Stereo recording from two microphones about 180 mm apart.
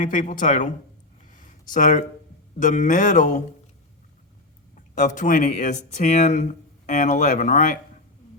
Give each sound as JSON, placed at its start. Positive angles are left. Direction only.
{"t": 0.0, "sound": "speech", "side_deg": 45}
{"t": 1.3, "sound": "a sound", "side_deg": 45}
{"t": 2.6, "sound": "speech", "side_deg": 45}
{"t": 4.9, "sound": "speech", "side_deg": 40}